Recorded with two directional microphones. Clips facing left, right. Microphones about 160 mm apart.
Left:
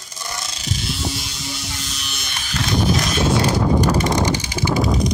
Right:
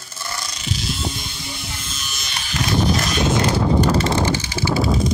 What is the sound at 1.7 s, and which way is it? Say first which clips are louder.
Electric shaver: left 1 dB; 75° left (ahead or behind).